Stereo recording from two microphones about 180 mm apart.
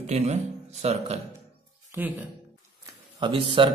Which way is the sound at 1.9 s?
10° right (ahead or behind).